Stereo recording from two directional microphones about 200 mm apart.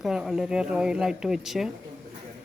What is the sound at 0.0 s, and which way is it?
Speech, centre (ahead or behind).